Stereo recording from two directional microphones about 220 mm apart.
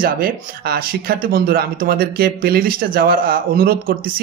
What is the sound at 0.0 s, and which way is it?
Speech, 40° right (ahead or behind).